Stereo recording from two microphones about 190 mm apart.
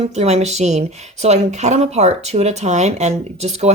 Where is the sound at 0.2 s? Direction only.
35° right (ahead or behind).